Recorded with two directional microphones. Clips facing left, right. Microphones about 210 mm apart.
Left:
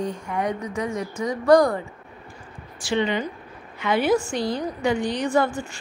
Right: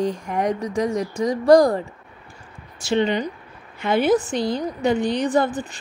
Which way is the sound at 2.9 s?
40° right (ahead or behind).